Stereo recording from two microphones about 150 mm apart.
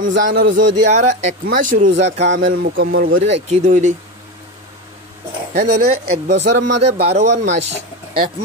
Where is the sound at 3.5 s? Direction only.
55° right (ahead or behind).